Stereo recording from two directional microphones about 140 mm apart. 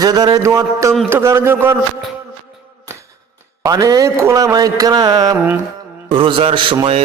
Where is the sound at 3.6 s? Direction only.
25° right (ahead or behind).